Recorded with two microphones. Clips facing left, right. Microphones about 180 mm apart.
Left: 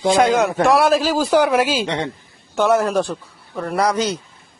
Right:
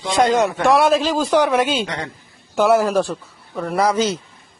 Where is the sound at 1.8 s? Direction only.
25° left (ahead or behind).